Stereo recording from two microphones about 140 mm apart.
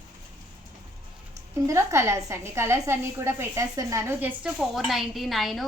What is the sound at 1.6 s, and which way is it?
A woman's voice, 20° right (ahead or behind).